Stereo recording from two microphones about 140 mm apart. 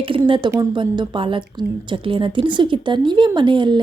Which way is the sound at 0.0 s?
40° right (ahead or behind).